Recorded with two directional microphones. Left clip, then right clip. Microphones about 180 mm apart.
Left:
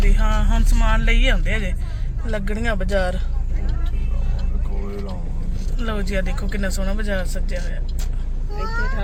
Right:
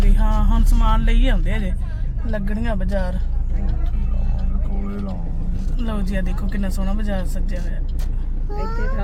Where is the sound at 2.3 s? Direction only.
5° right (ahead or behind).